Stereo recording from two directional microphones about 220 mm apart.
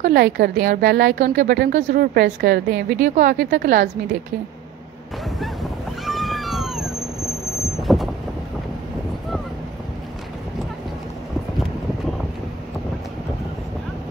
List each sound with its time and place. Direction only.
0.0 s a woman's voice: 45° right (ahead or behind)
5.4 s a sound: centre (ahead or behind)
7.8 s vehicle: centre (ahead or behind)